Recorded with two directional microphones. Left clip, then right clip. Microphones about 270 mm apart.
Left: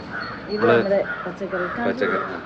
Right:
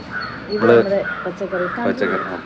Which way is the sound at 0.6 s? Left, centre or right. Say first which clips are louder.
Right 5 dB; centre.